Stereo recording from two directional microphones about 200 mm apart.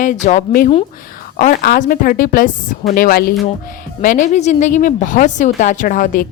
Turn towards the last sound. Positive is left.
turn(degrees=45)  # may be behind; listen again after turning